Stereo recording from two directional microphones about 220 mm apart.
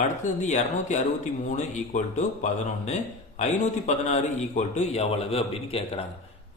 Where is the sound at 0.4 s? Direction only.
35° left (ahead or behind).